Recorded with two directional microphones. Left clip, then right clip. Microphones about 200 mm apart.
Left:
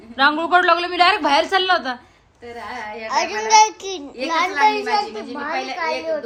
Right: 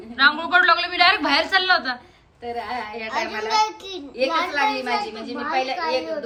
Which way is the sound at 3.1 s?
30° left (ahead or behind).